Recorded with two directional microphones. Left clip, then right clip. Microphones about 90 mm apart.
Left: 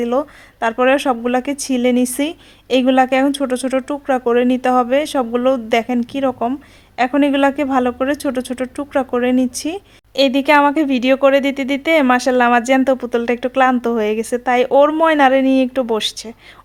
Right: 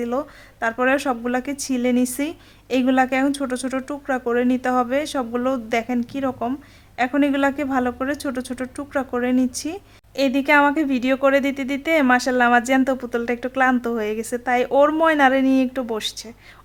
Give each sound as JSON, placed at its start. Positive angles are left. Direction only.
{"t": 0.0, "sound": "speech", "side_deg": 30}